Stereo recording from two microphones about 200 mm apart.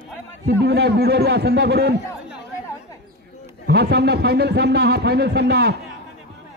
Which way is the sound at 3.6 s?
55° right (ahead or behind).